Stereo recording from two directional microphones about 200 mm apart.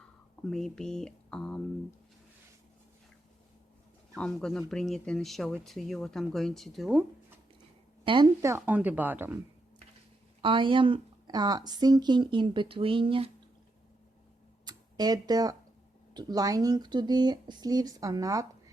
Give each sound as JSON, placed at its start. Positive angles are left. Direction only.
{"t": 0.4, "sound": "speech", "side_deg": 5}
{"t": 4.1, "sound": "speech", "side_deg": 5}
{"t": 8.0, "sound": "speech", "side_deg": -25}
{"t": 10.4, "sound": "speech", "side_deg": -25}
{"t": 14.6, "sound": "a sound", "side_deg": -20}
{"t": 16.1, "sound": "speech", "side_deg": -20}